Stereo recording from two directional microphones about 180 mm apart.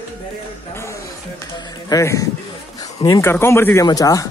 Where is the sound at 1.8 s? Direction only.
20° left (ahead or behind).